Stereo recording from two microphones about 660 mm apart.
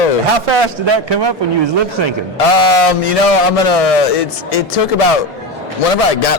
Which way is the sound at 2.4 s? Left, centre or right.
Left.